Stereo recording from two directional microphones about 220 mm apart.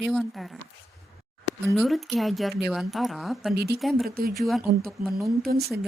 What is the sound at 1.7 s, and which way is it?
Speech, centre (ahead or behind).